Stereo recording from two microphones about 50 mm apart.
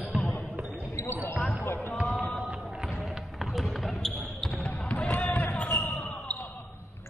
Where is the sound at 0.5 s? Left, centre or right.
Right.